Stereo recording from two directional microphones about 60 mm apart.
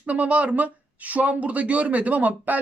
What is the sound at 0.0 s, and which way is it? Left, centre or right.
A man's voice, right.